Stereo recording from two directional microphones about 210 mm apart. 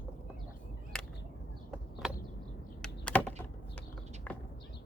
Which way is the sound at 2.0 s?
5° right (ahead or behind).